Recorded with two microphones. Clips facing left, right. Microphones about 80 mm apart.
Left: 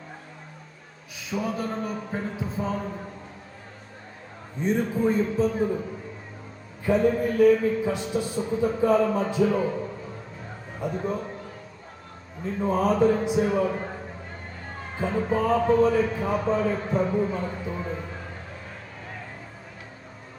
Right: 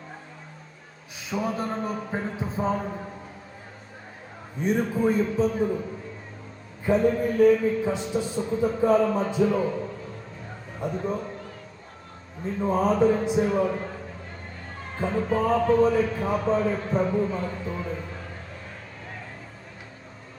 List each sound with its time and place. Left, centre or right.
1.4 s speech: right
2.0 s speech: centre
2.4 s speech: right
4.7 s a man's voice: centre
6.8 s a man's voice: centre
12.5 s a man's voice: centre
13.7 s a sound: left
14.9 s a man's voice: centre